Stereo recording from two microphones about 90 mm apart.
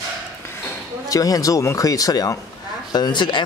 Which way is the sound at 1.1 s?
40° left (ahead or behind).